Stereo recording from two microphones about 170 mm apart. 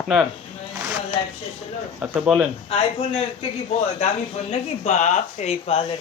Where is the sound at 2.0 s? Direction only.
5° right (ahead or behind).